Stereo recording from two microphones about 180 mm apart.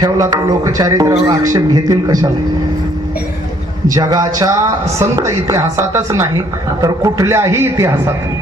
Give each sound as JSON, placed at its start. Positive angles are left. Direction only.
{"t": 0.0, "sound": "speech", "side_deg": -20}
{"t": 3.8, "sound": "speech", "side_deg": -20}